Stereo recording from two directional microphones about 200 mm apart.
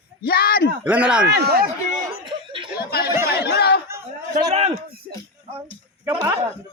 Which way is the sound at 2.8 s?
50° left (ahead or behind).